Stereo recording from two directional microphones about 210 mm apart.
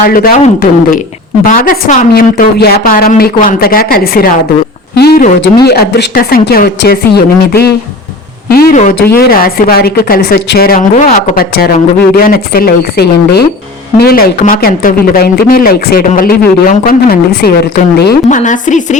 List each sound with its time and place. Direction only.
0.0 s speech: 40° left (ahead or behind)